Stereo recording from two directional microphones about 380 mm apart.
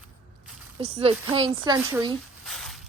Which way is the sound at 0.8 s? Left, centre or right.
Centre.